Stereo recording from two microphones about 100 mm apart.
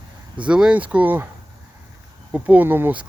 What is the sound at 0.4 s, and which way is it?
Speech, 10° right (ahead or behind).